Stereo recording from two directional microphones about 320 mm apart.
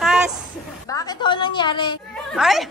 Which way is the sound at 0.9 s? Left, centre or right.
Centre.